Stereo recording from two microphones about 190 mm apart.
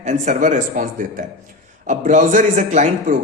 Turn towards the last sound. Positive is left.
turn(degrees=-40)  # may be behind; listen again after turning